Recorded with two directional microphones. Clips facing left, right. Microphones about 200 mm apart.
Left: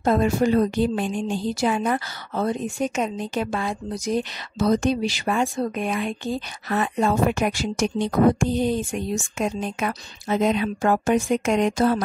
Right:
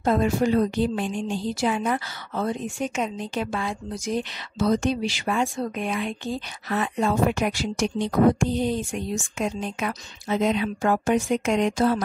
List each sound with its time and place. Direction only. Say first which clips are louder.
0.0 s a woman's voice: left 2 dB; 45° left (ahead or behind)